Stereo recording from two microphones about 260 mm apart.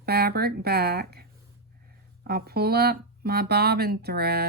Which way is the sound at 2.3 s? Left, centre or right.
Right.